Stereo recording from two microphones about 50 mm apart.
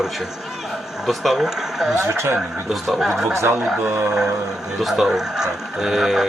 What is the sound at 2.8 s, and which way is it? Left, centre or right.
Speech, centre.